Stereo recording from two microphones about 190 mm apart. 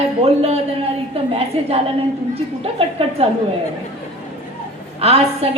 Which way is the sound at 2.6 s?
30° right (ahead or behind).